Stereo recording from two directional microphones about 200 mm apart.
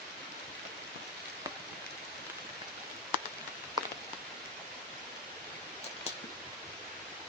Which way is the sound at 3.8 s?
25° right (ahead or behind).